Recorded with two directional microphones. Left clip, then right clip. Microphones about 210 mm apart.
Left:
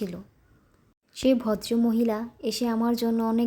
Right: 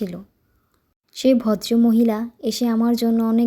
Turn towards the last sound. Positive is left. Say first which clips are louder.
# right 6 dB
turn(degrees=-10)  # may be behind; listen again after turning